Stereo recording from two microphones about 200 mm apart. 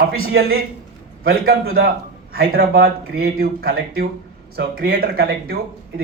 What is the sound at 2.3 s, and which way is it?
A man's voice, 50° right (ahead or behind).